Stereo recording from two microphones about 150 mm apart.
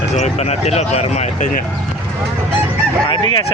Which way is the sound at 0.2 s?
45° left (ahead or behind).